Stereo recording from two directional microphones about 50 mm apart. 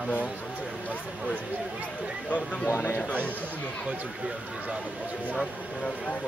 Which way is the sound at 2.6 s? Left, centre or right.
Left.